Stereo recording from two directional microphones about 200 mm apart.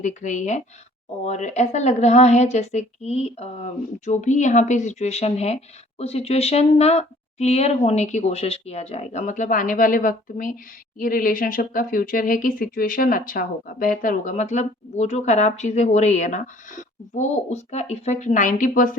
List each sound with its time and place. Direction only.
0.0 s speech: 40° left (ahead or behind)